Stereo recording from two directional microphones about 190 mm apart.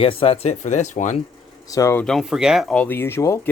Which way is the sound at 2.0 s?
Centre (ahead or behind).